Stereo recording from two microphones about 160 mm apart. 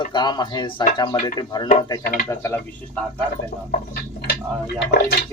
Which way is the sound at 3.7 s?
80° left.